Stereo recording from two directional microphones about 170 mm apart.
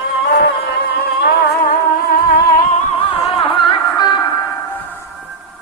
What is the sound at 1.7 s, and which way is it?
Music, 65° left (ahead or behind).